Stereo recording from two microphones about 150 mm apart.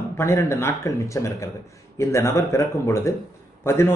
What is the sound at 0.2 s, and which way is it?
A man's voice, 15° left (ahead or behind).